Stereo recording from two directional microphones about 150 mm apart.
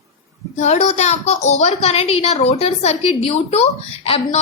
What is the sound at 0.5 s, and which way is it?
A woman's voice, 50° left (ahead or behind).